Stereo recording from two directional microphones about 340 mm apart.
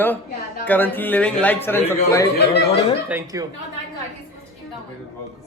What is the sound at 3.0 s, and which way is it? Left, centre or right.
Speech, centre.